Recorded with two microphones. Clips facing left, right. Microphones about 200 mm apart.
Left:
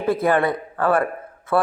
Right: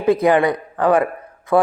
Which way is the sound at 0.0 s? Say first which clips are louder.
Right 4 dB; 15° right (ahead or behind).